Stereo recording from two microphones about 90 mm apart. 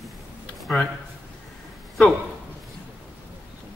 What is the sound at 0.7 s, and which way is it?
Speech, 15° left (ahead or behind).